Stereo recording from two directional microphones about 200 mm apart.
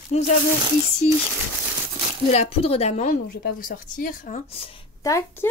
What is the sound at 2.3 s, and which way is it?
Speech, 30° left (ahead or behind).